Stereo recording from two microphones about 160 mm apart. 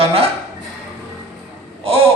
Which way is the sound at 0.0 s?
35° right (ahead or behind).